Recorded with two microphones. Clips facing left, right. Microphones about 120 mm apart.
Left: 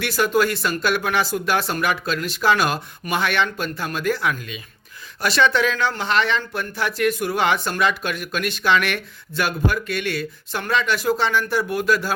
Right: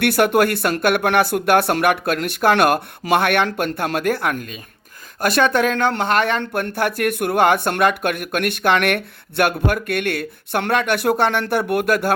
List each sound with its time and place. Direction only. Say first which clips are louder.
0.0 s speech: right 4 dB; 60° right (ahead or behind)